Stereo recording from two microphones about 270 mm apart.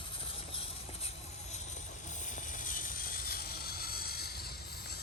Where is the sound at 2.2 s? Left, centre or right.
Left.